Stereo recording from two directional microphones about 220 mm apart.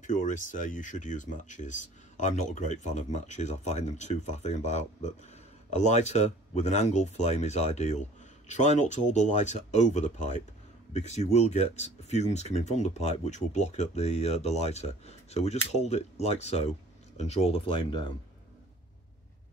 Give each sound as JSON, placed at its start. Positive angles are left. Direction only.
{"t": 0.0, "sound": "speech", "side_deg": 35}